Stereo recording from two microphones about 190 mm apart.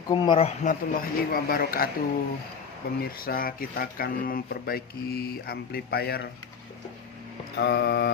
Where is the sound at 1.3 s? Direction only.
50° left (ahead or behind).